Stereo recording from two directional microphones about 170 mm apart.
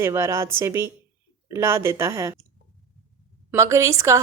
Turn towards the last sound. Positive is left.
turn(degrees=-15)  # may be behind; listen again after turning